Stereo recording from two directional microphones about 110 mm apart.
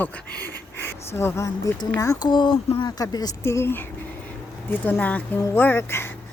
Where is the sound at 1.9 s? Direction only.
30° left (ahead or behind).